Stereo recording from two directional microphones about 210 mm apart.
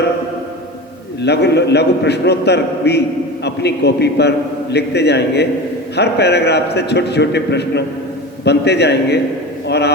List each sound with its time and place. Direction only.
1.2 s a man's voice: 55° left (ahead or behind)